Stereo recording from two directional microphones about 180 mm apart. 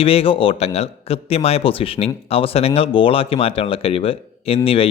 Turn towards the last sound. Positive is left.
turn(degrees=30)  # may be behind; listen again after turning